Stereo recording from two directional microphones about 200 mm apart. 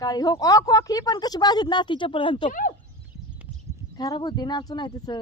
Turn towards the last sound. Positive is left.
turn(degrees=20)  # may be behind; listen again after turning